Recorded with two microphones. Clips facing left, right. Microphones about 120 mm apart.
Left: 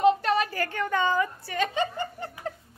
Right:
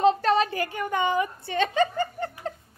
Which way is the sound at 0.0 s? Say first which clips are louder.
Right 1 dB; 30° right (ahead or behind).